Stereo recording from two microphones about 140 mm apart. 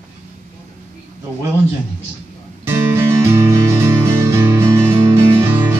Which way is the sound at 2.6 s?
15° right (ahead or behind).